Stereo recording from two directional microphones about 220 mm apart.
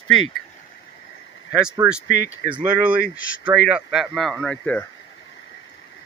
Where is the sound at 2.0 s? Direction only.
50° left (ahead or behind).